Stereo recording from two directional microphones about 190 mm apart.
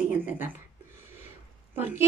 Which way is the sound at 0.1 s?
10° right (ahead or behind).